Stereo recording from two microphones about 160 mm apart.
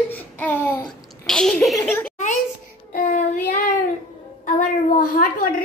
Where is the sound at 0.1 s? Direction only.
10° left (ahead or behind).